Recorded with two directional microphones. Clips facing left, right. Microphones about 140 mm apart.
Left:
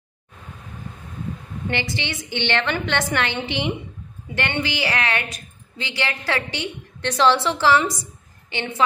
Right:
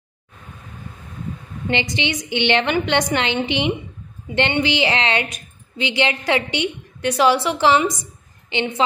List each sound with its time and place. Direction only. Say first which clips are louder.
1.7 s a woman's voice: right 5 dB; 20° right (ahead or behind)